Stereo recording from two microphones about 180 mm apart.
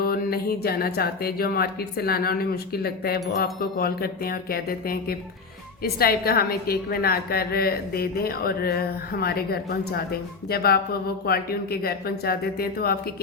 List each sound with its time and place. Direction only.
0.0 s speech: 55° left (ahead or behind)